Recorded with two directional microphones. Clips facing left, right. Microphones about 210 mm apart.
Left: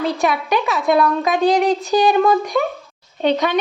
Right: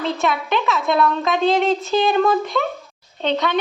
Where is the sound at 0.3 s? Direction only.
Centre (ahead or behind).